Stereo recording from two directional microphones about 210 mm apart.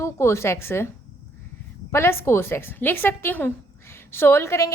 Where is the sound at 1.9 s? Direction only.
10° left (ahead or behind).